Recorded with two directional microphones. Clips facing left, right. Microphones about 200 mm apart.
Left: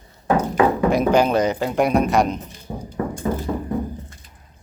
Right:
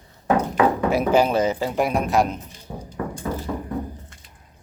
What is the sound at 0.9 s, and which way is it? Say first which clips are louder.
Speech: left 1 dB; 5° right (ahead or behind).